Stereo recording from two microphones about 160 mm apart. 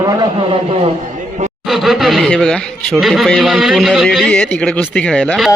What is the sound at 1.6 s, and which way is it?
Speech, centre (ahead or behind).